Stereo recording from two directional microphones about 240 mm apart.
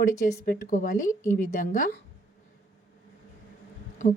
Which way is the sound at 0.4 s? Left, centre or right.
Left.